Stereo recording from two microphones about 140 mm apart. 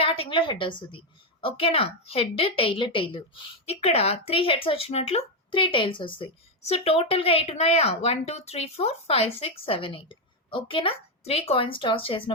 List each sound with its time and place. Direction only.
0.0 s a woman's voice: 40° left (ahead or behind)